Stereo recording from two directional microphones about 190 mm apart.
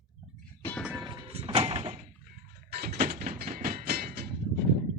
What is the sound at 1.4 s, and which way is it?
Door, 30° right (ahead or behind).